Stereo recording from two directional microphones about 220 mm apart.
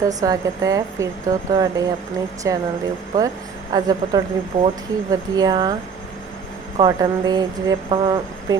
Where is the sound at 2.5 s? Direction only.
15° right (ahead or behind).